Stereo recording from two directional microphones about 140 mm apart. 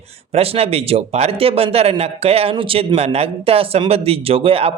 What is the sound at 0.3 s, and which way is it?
A man's voice, 45° right (ahead or behind).